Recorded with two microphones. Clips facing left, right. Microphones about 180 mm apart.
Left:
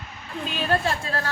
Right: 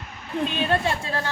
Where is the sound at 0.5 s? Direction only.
25° right (ahead or behind).